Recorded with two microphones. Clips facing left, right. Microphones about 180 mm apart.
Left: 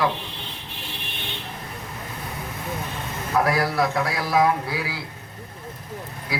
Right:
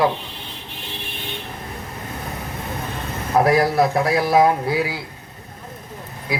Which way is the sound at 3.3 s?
30° right (ahead or behind).